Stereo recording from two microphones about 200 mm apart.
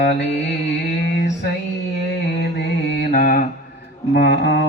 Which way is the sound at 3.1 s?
45° left (ahead or behind).